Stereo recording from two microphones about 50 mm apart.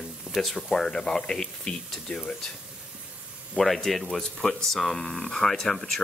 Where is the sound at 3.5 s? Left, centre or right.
Centre.